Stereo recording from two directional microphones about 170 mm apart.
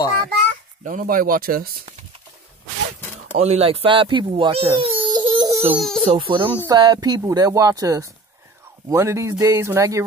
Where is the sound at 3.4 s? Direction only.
35° right (ahead or behind).